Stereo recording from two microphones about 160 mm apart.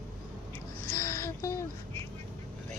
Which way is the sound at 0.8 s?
15° left (ahead or behind).